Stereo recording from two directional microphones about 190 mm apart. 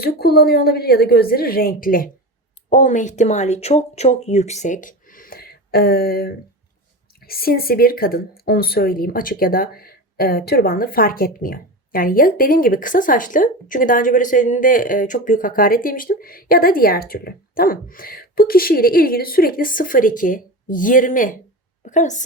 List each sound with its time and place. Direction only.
0.0 s a woman's voice: 55° left (ahead or behind)